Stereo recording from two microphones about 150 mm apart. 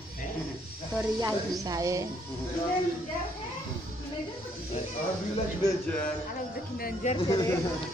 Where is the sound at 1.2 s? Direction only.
20° right (ahead or behind).